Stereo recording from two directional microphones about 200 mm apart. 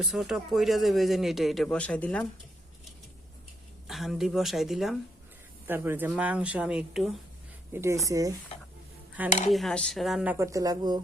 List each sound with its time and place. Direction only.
0.0 s speech: centre (ahead or behind)
3.8 s speech: centre (ahead or behind)
7.7 s speech: 15° right (ahead or behind)
9.5 s speech: centre (ahead or behind)
10.3 s speech: 15° right (ahead or behind)